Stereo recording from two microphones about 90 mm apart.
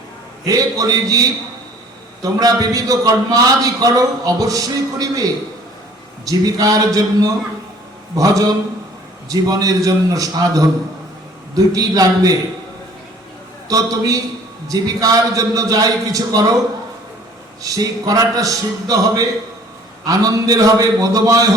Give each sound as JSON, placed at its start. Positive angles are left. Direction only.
{"t": 0.4, "sound": "a man's voice", "side_deg": -45}
{"t": 2.2, "sound": "a man's voice", "side_deg": -45}
{"t": 13.7, "sound": "a man's voice", "side_deg": -40}
{"t": 17.6, "sound": "a man's voice", "side_deg": -40}